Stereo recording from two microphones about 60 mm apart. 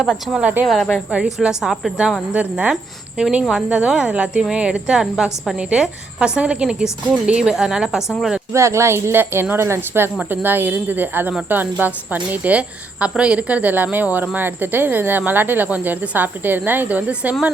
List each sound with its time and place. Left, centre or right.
0.0 s a woman's voice: centre
0.7 s speech: centre
1.1 s a woman's voice: centre
8.5 s a woman's voice: right